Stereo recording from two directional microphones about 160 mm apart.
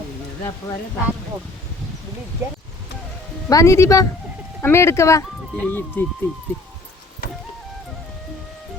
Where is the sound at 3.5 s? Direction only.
20° left (ahead or behind).